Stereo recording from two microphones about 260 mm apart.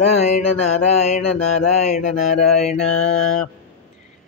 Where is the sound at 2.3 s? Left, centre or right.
Left.